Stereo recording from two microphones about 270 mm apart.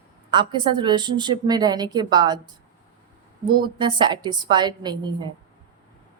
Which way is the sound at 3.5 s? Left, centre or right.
Centre.